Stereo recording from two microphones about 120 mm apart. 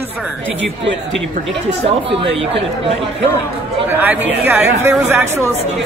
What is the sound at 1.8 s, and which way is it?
Speech, 55° right (ahead or behind).